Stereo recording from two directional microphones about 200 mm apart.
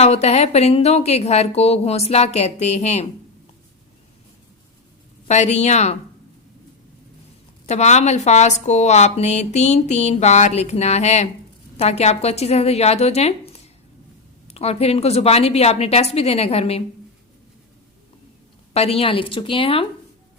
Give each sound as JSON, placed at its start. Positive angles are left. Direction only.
{"t": 0.0, "sound": "a woman's voice", "side_deg": 30}
{"t": 5.3, "sound": "a woman's voice", "side_deg": 35}
{"t": 7.7, "sound": "a woman's voice", "side_deg": 35}
{"t": 18.7, "sound": "speech", "side_deg": 30}